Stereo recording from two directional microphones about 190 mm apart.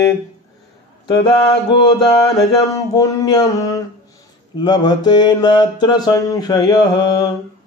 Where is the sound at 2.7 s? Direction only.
20° left (ahead or behind).